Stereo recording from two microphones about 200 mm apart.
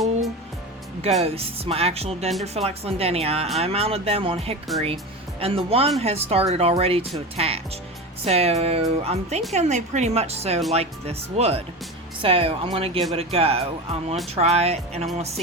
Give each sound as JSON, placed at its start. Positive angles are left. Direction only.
{"t": 1.2, "sound": "speech", "side_deg": -30}